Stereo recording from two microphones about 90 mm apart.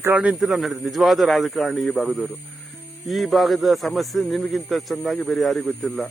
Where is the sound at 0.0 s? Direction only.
15° right (ahead or behind).